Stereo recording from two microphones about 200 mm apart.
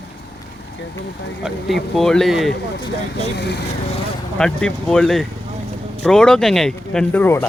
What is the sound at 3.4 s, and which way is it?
Speech, 60° left (ahead or behind).